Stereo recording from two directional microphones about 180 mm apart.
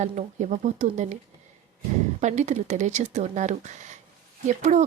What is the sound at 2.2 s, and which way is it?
Speech, 40° right (ahead or behind).